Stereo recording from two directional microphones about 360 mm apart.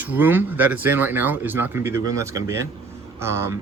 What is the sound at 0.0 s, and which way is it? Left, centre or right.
A man's voice, centre.